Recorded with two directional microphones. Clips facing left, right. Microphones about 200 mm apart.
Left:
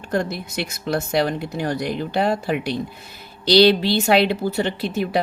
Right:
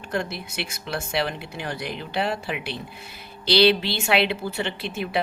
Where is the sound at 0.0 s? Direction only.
40° left (ahead or behind).